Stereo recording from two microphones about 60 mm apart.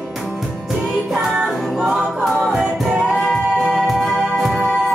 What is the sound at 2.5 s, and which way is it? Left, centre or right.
Music, centre.